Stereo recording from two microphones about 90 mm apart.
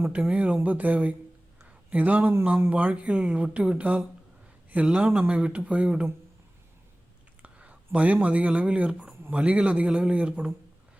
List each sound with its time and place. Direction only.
0.1 s speech: 15° right (ahead or behind)
7.4 s speech: 15° right (ahead or behind)